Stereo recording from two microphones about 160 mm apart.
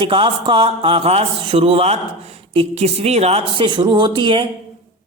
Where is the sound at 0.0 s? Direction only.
30° right (ahead or behind).